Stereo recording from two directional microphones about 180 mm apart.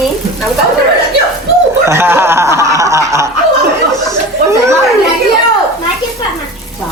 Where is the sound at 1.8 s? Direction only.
15° right (ahead or behind).